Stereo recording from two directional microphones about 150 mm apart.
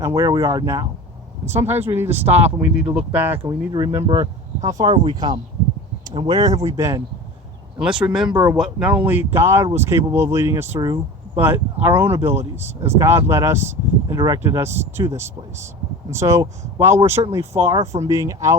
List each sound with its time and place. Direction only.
0.0 s speech: 25° right (ahead or behind)
3.4 s speech: 30° right (ahead or behind)
7.8 s speech: 5° right (ahead or behind)
8.3 s speech: 25° right (ahead or behind)
8.5 s speech: 5° right (ahead or behind); by 11.0 s 25° right (ahead or behind)
11.3 s speech: 15° right (ahead or behind)